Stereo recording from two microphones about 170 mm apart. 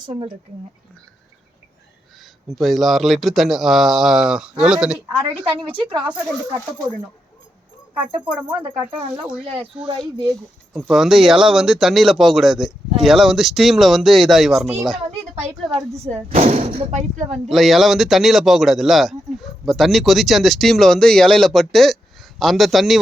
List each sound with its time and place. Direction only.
2.5 s speech: centre (ahead or behind)
5.4 s a woman's voice: 30° right (ahead or behind)
7.9 s speech: 10° right (ahead or behind)
9.8 s a woman's voice: 30° right (ahead or behind)
10.8 s speech: 5° right (ahead or behind)
16.0 s speech: 40° right (ahead or behind)
17.5 s speech: centre (ahead or behind)